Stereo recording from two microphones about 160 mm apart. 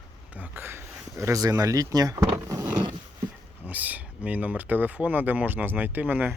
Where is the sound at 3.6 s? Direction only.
10° right (ahead or behind).